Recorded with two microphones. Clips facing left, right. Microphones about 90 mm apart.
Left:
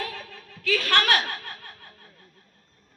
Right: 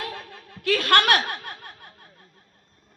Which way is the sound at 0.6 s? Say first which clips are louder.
Right 3 dB; 60° right (ahead or behind).